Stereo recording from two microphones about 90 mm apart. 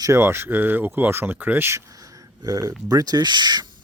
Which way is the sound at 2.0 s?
40° right (ahead or behind).